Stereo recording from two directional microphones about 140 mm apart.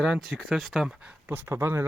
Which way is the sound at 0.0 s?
5° right (ahead or behind).